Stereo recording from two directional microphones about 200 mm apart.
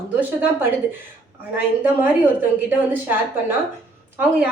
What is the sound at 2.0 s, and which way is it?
A woman's voice, 10° right (ahead or behind).